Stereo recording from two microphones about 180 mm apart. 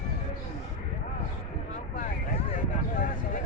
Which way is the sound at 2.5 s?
45° left (ahead or behind).